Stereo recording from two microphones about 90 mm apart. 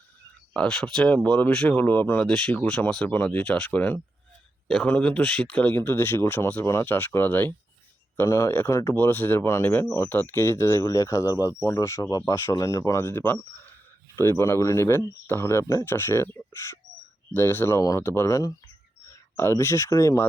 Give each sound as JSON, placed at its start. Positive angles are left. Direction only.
{"t": 0.5, "sound": "speech", "side_deg": 10}
{"t": 1.7, "sound": "speech", "side_deg": 20}
{"t": 17.3, "sound": "speech", "side_deg": 25}
{"t": 17.7, "sound": "speech", "side_deg": 40}
{"t": 18.0, "sound": "speech", "side_deg": 30}